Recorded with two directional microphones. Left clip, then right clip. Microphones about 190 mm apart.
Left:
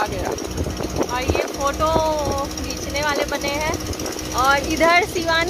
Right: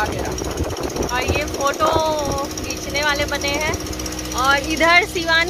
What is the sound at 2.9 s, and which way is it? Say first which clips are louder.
Speech: right 2 dB; 5° left (ahead or behind).